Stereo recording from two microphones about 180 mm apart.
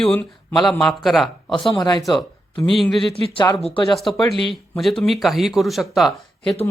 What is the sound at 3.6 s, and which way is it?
Speech, 25° left (ahead or behind).